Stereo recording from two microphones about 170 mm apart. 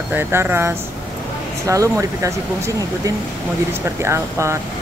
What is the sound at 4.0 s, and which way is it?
Speech, 15° right (ahead or behind).